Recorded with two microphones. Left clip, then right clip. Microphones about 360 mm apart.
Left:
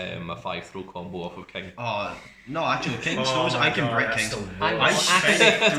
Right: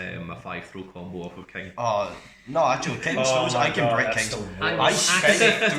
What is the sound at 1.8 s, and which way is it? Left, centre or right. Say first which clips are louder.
A man's voice: right 5 dB; centre.